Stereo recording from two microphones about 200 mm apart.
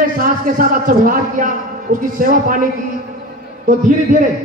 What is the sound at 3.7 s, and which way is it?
Speech, 40° right (ahead or behind).